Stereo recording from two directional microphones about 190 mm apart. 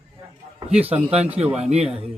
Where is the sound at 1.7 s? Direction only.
30° right (ahead or behind).